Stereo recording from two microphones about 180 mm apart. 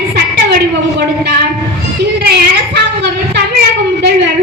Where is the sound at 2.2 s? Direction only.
65° right (ahead or behind).